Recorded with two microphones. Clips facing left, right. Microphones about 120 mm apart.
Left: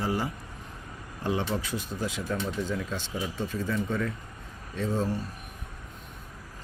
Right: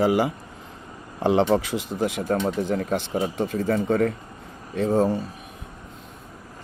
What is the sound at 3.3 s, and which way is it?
Speech, 70° right (ahead or behind).